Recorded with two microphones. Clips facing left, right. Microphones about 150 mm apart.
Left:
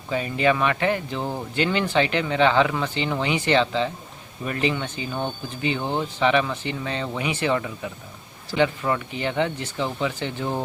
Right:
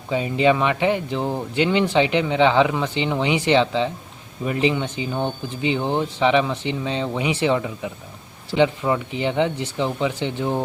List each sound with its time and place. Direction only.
0.1 s speech: 20° right (ahead or behind)